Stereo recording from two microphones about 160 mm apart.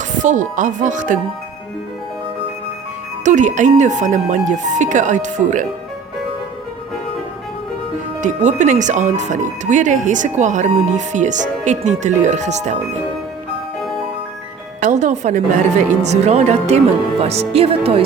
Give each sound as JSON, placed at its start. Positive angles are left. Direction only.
{"t": 0.2, "sound": "speech", "side_deg": -50}
{"t": 3.2, "sound": "speech", "side_deg": -50}
{"t": 8.2, "sound": "speech", "side_deg": -50}
{"t": 14.8, "sound": "music", "side_deg": -50}
{"t": 16.0, "sound": "speech", "side_deg": -45}